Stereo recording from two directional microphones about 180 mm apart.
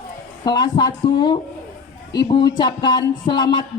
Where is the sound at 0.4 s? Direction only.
25° left (ahead or behind).